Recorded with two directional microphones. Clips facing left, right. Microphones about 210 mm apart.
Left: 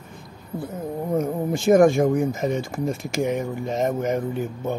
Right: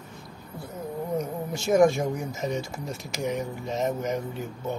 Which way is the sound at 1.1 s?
55° left (ahead or behind).